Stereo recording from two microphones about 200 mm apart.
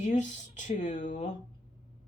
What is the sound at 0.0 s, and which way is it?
A woman's voice, 40° left (ahead or behind).